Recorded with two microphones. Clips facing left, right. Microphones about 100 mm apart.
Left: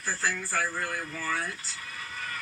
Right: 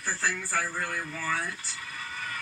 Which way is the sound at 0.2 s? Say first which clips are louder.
Left 1 dB; centre (ahead or behind).